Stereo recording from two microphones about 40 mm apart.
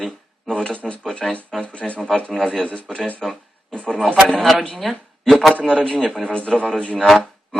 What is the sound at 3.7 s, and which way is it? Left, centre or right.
Speech, left.